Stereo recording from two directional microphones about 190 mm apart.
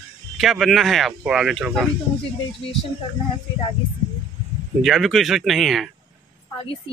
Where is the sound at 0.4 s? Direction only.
Centre (ahead or behind).